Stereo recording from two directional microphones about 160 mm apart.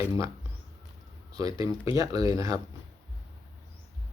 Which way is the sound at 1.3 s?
25° right (ahead or behind).